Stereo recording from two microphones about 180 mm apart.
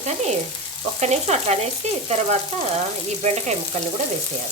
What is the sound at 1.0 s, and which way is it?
Frying, 40° right (ahead or behind).